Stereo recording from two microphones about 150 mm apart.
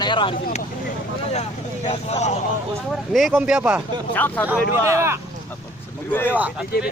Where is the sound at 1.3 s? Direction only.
45° left (ahead or behind).